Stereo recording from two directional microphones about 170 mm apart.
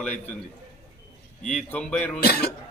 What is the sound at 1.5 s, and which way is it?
Speech, 5° left (ahead or behind).